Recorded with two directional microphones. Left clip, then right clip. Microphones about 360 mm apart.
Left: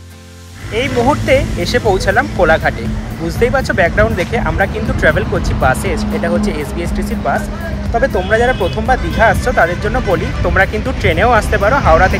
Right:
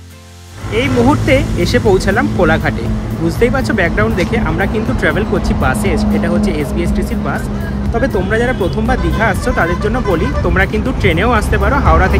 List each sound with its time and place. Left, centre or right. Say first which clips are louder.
0.7 s speech: right 1 dB; centre